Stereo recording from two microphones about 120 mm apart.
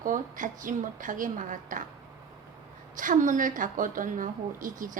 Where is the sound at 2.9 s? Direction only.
90° right.